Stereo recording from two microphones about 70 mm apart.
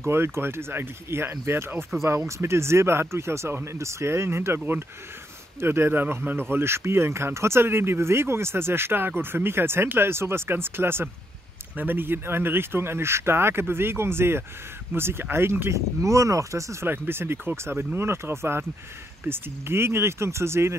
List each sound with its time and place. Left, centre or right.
0.0 s speech: right
15.7 s speech: right
16.8 s speech: right